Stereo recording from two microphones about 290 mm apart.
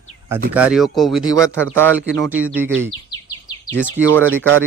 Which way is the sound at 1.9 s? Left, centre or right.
Right.